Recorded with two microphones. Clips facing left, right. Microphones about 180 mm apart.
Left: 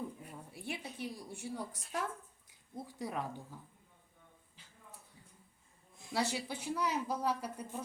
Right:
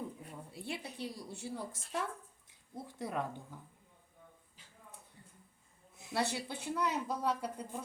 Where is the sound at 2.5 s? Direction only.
25° right (ahead or behind).